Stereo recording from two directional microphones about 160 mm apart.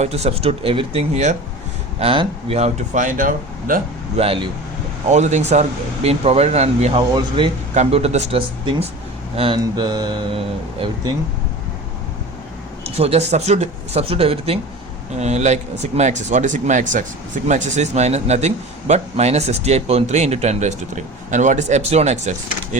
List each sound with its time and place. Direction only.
0.0 s a man's voice: 40° right (ahead or behind); by 3.8 s 55° right (ahead or behind)
4.2 s speech: 35° right (ahead or behind)
5.0 s a man's voice: 45° right (ahead or behind)
7.1 s speech: 30° right (ahead or behind)
7.7 s speech: 40° right (ahead or behind)
12.8 s a man's voice: 40° right (ahead or behind)